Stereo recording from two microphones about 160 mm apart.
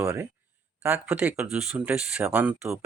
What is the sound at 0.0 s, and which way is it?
Speech, 10° right (ahead or behind).